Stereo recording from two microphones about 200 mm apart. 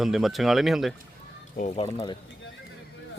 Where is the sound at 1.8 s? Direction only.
25° left (ahead or behind).